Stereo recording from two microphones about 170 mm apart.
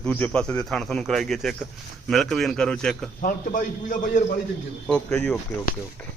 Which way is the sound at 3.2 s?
50° left (ahead or behind).